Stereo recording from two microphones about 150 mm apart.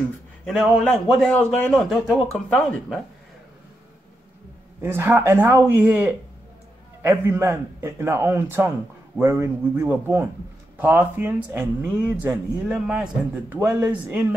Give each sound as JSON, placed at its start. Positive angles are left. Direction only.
{"t": 0.5, "sound": "a man's voice", "side_deg": 0}
{"t": 4.8, "sound": "speech", "side_deg": -15}